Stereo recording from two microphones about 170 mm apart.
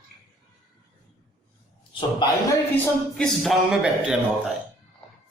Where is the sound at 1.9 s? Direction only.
25° left (ahead or behind).